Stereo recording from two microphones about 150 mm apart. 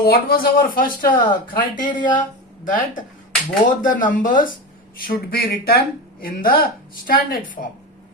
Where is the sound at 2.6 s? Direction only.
60° left (ahead or behind).